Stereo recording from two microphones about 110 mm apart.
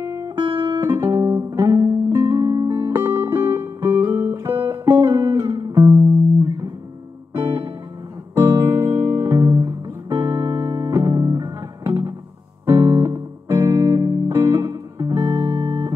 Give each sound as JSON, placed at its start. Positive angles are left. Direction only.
{"t": 0.0, "sound": "music", "side_deg": -25}
{"t": 10.1, "sound": "music", "side_deg": -50}
{"t": 10.4, "sound": "music", "side_deg": -35}